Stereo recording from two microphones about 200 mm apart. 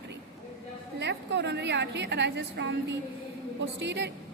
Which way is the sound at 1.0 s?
60° right (ahead or behind).